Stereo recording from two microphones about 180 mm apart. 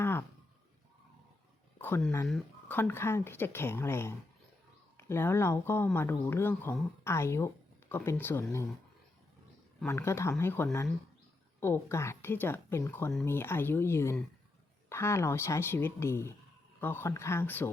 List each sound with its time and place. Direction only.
0.0 s a sound: 15° left (ahead or behind)
1.8 s speech: 5° left (ahead or behind)
9.8 s speech: 15° left (ahead or behind)